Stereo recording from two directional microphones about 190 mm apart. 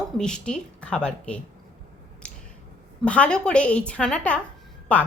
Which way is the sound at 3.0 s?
5° left (ahead or behind).